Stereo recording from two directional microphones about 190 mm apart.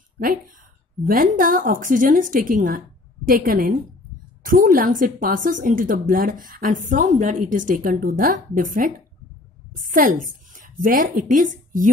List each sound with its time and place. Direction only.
1.0 s a woman's voice: 45° right (ahead or behind)